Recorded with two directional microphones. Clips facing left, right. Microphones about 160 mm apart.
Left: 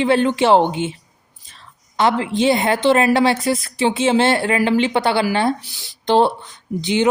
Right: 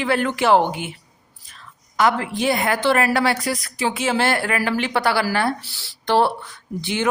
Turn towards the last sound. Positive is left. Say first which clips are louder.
# left 6 dB
turn(degrees=20)  # may be behind; listen again after turning